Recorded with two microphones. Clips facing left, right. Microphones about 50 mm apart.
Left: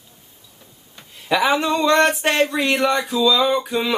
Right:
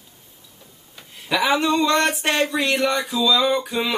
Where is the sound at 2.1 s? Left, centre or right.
Centre.